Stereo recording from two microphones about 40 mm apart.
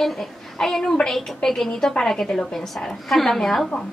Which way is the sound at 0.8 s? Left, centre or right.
Left.